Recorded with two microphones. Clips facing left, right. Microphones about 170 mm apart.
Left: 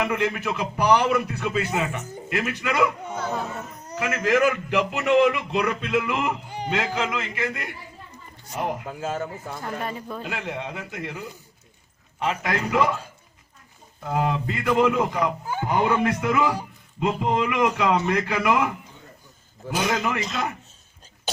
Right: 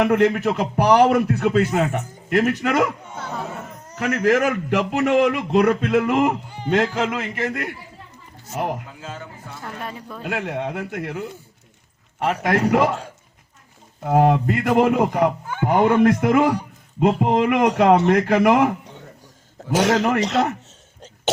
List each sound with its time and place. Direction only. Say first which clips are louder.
0.0 s a man's voice: right 8 dB; 55° right (ahead or behind)
4.2 s a man's voice: right 2 dB; 50° right (ahead or behind)
8.9 s speech: left 7 dB; 45° left (ahead or behind)
9.8 s speech: left 2 dB; centre (ahead or behind)
10.2 s speech: right 9 dB; 55° right (ahead or behind)
12.2 s a man's voice: right 6 dB; 55° right (ahead or behind)
14.0 s a man's voice: right 8 dB; 55° right (ahead or behind)
17.9 s speech: right 7 dB; 65° right (ahead or behind)
19.7 s speech: right 7 dB; 80° right